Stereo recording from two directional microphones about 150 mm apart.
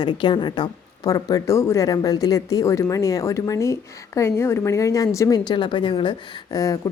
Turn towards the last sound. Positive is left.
turn(degrees=25)  # may be behind; listen again after turning